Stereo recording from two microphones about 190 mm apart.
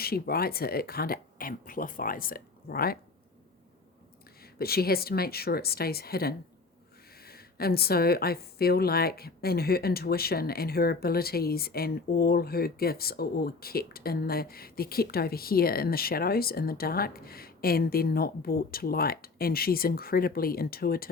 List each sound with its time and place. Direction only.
0.0 s a woman's voice: 55° left (ahead or behind)
4.5 s a woman's voice: 55° left (ahead or behind)